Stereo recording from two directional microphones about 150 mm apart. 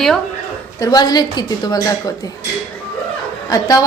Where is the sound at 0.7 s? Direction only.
25° left (ahead or behind).